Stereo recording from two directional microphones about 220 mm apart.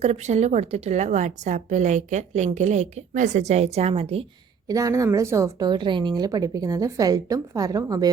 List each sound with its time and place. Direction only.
0.0 s a woman's voice: 30° right (ahead or behind)
4.7 s a woman's voice: 15° right (ahead or behind)